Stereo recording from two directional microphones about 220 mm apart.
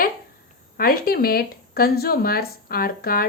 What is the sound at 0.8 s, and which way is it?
Speech, 40° left (ahead or behind).